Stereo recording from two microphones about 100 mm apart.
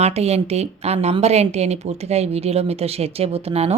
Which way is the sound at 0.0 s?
90° right.